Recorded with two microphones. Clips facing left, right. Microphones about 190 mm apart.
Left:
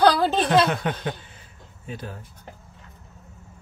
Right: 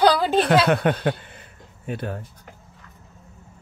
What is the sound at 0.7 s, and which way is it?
Speech, 60° right (ahead or behind).